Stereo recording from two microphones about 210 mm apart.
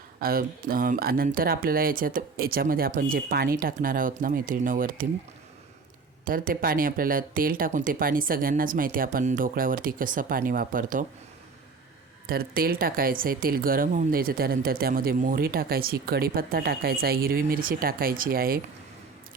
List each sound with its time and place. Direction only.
0.2 s speech: 45° right (ahead or behind)
6.2 s speech: 40° right (ahead or behind)
12.3 s speech: 45° right (ahead or behind)